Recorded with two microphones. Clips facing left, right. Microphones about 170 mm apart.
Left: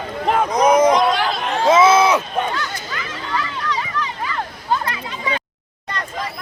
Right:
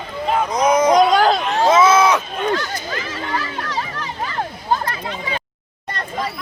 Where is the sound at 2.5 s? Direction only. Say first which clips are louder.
Right 4 dB; 45° right (ahead or behind).